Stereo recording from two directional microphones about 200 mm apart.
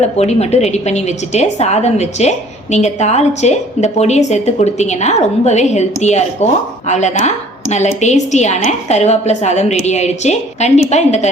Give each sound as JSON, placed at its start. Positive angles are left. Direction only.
{"t": 0.0, "sound": "a woman's voice", "side_deg": 35}